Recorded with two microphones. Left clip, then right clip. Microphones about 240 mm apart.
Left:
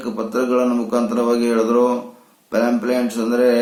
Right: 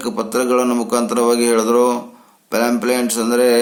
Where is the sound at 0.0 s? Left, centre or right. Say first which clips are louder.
Right 2 dB; right.